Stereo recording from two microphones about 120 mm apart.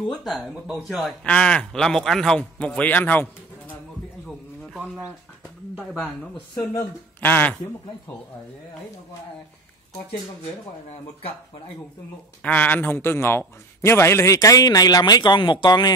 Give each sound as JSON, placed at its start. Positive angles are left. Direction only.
{"t": 0.1, "sound": "speech", "side_deg": 0}
{"t": 1.2, "sound": "speech", "side_deg": 10}
{"t": 5.8, "sound": "speech", "side_deg": 0}
{"t": 6.5, "sound": "speech", "side_deg": 25}
{"t": 12.4, "sound": "a man's voice", "side_deg": 10}